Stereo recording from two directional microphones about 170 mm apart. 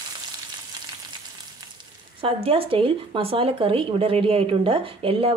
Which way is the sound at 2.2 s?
30° right (ahead or behind).